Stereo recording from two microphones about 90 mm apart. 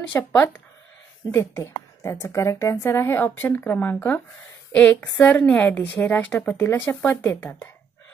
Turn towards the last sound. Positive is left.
turn(degrees=15)  # may be behind; listen again after turning